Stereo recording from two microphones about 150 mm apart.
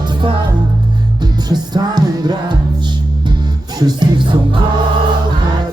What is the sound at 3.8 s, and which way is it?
Music, 30° right (ahead or behind).